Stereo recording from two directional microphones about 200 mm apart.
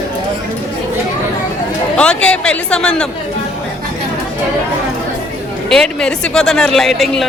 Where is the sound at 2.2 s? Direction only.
5° left (ahead or behind).